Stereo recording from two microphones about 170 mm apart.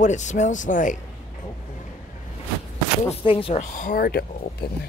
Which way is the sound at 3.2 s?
35° left (ahead or behind).